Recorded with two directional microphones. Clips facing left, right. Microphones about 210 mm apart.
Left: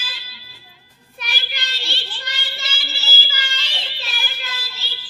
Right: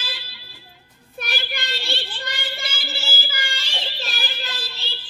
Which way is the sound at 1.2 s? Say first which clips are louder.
Right 3 dB; 55° right (ahead or behind).